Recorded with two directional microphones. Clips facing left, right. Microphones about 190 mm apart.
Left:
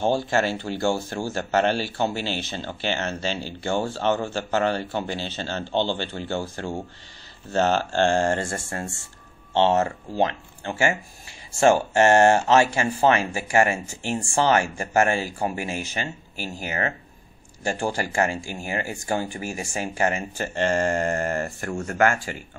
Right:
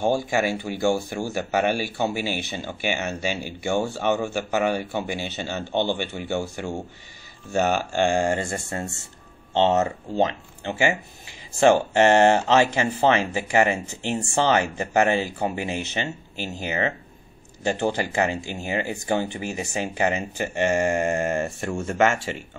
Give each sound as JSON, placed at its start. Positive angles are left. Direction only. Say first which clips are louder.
{"t": 0.0, "sound": "speech", "louder": "even", "side_deg": -50}
{"t": 0.3, "sound": "speech", "louder": "even", "side_deg": -15}
{"t": 7.7, "sound": "speech", "louder": "left 1 dB", "side_deg": -10}